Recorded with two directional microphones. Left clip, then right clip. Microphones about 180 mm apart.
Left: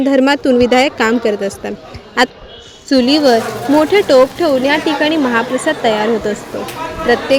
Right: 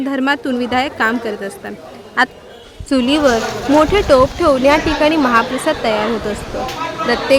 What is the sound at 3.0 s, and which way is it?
A woman's voice, 10° left (ahead or behind).